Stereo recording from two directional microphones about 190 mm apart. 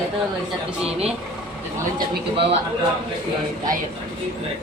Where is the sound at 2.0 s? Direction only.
30° right (ahead or behind).